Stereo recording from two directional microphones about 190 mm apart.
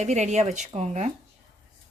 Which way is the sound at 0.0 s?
35° right (ahead or behind).